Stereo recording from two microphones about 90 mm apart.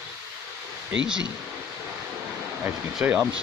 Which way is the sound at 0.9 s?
10° right (ahead or behind).